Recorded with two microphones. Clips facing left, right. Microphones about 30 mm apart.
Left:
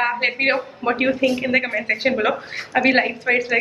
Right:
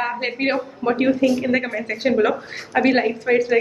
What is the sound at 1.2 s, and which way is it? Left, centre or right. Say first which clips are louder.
A woman's voice: even; left.